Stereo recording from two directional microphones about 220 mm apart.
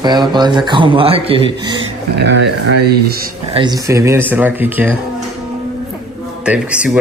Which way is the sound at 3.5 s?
20° right (ahead or behind).